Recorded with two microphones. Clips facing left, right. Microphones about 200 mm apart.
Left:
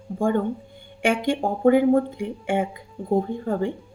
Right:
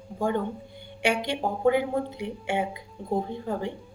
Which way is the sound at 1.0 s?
50° left (ahead or behind).